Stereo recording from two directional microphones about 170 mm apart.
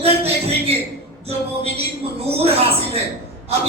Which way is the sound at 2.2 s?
35° right (ahead or behind).